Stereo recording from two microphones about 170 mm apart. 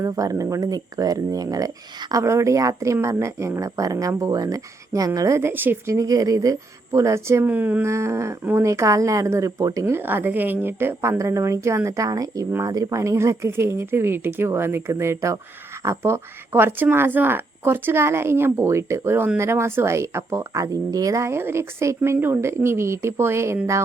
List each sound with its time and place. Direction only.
0.0 s speech: 20° right (ahead or behind)